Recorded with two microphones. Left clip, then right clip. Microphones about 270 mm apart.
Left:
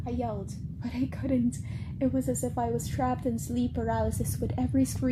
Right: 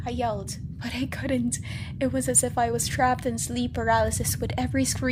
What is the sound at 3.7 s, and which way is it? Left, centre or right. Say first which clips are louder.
Speech: right 10 dB; right.